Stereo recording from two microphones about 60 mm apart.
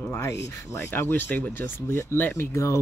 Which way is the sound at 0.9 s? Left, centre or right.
Left.